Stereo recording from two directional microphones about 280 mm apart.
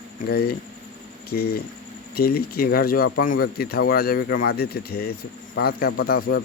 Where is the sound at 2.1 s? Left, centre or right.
Left.